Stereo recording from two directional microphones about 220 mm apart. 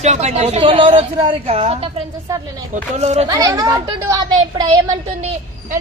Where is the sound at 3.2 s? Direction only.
15° right (ahead or behind).